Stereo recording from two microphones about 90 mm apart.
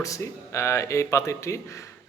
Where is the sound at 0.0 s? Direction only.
35° left (ahead or behind).